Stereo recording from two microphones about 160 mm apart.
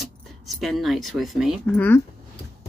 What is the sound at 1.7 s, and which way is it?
Speech, 10° left (ahead or behind).